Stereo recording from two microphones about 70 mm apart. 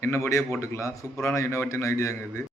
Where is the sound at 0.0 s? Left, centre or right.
Left.